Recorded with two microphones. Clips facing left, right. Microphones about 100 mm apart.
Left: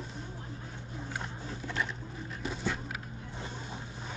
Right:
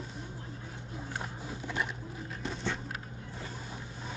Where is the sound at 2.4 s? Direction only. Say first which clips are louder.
Left 1 dB; 5° left (ahead or behind).